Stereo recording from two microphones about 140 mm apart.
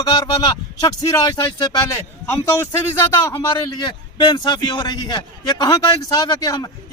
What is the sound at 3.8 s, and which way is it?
Speech, 30° left (ahead or behind).